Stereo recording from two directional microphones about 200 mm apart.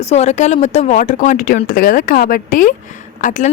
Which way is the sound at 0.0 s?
35° left (ahead or behind).